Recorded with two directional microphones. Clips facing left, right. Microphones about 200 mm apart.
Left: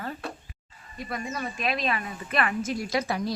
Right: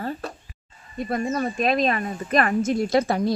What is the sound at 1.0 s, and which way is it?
Speech, 45° right (ahead or behind).